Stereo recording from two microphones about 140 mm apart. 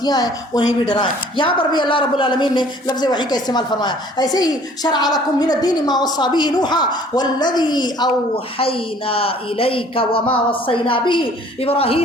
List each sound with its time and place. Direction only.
0.0 s speech: 30° left (ahead or behind)
8.5 s speech: 40° left (ahead or behind)